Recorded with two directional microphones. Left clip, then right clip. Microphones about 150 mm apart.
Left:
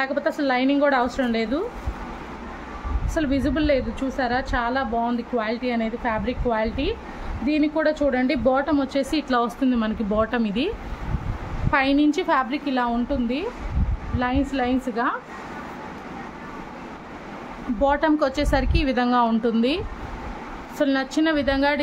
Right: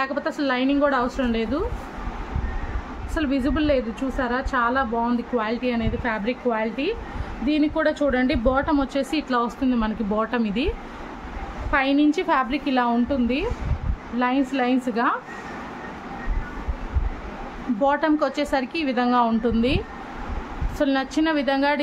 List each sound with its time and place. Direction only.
0.0 s a woman's voice: centre (ahead or behind)
3.2 s a woman's voice: centre (ahead or behind)
11.7 s a woman's voice: 15° left (ahead or behind); by 15.1 s 5° right (ahead or behind)
17.8 s a woman's voice: 10° left (ahead or behind)